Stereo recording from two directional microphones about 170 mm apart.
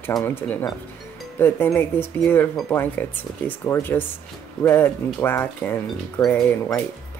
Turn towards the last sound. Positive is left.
turn(degrees=10)  # may be behind; listen again after turning